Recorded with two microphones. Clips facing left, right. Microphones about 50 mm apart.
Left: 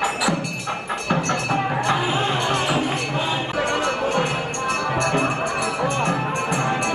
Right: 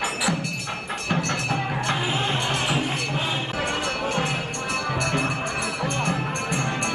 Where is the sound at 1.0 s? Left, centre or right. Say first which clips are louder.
Left 3 dB; centre.